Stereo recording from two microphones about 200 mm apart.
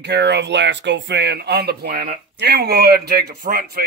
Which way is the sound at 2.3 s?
55° right (ahead or behind).